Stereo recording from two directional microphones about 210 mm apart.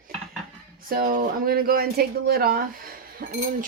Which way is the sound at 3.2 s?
50° right (ahead or behind).